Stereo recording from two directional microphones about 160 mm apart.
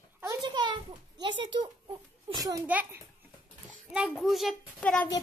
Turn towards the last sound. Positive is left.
turn(degrees=10)  # may be behind; listen again after turning